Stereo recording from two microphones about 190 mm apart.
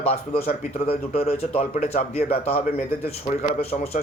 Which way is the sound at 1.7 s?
35° left (ahead or behind).